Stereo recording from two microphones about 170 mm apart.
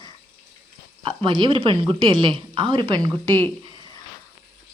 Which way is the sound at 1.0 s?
30° right (ahead or behind).